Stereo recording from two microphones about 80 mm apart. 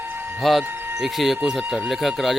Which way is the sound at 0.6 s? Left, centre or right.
Right.